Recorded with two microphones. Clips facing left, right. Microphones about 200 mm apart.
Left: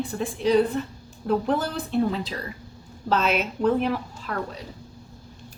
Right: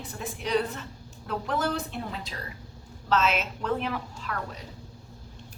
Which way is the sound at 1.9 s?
30° left (ahead or behind).